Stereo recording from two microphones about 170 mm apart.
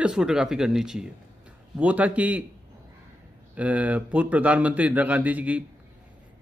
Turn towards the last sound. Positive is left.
turn(degrees=-10)  # may be behind; listen again after turning